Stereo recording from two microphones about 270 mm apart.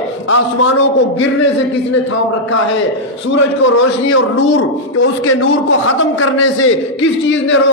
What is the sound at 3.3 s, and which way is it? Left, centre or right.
A man's voice, left.